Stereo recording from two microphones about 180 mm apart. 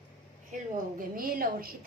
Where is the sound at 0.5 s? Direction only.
40° right (ahead or behind).